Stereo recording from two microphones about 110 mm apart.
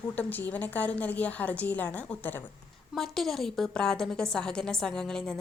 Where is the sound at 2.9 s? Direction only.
Centre (ahead or behind).